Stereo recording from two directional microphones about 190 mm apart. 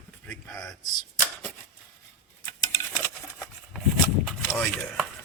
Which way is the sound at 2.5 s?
15° left (ahead or behind).